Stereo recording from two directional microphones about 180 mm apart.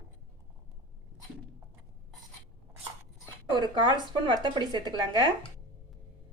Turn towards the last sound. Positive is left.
turn(degrees=-25)  # may be behind; listen again after turning